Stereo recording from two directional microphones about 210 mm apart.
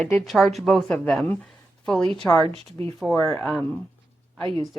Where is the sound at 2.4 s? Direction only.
30° right (ahead or behind).